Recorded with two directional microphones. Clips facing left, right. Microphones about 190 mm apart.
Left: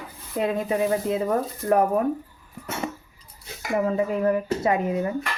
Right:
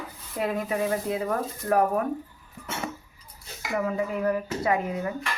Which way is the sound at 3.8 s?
25° left (ahead or behind).